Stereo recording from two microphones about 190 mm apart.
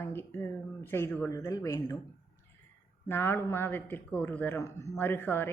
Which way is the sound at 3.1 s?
10° left (ahead or behind).